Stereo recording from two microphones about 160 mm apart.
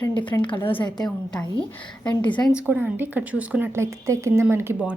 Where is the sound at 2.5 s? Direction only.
10° right (ahead or behind).